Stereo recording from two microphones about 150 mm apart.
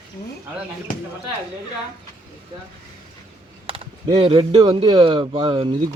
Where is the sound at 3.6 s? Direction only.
40° right (ahead or behind).